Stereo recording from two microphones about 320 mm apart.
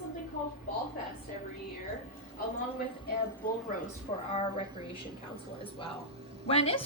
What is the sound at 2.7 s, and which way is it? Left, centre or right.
A woman's voice, left.